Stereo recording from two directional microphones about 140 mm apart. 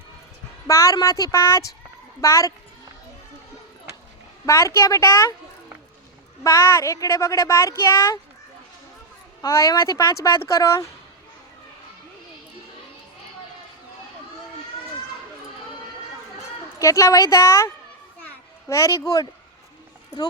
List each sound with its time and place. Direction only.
0.7 s a woman's voice: 20° left (ahead or behind)
4.4 s a woman's voice: 20° left (ahead or behind)
6.4 s a woman's voice: 20° left (ahead or behind)
9.4 s a woman's voice: 25° left (ahead or behind)
16.7 s a woman's voice: 20° left (ahead or behind)
18.2 s children playing: 15° left (ahead or behind)